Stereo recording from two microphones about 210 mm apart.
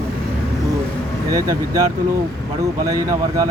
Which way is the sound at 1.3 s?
15° right (ahead or behind).